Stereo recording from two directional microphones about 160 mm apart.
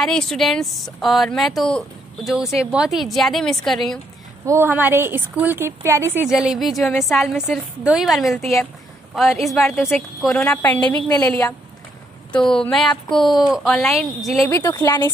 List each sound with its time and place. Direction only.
0.0 s a woman's voice: 5° left (ahead or behind)
4.5 s speech: 15° right (ahead or behind)
6.2 s a woman's voice: 5° right (ahead or behind)
10.7 s a woman's voice: 10° left (ahead or behind)
12.3 s a woman's voice: 5° left (ahead or behind)
14.5 s speech: 20° left (ahead or behind)